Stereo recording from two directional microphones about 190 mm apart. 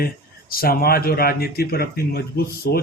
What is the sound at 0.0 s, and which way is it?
A man's voice, 50° left (ahead or behind).